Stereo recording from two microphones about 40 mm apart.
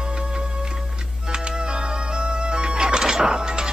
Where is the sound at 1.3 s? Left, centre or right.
Right.